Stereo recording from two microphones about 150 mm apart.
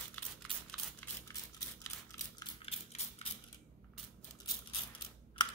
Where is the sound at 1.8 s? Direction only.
25° left (ahead or behind).